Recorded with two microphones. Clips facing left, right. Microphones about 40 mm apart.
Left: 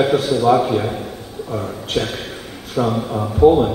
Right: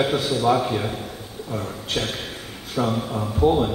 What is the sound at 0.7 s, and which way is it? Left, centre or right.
A man's voice, centre.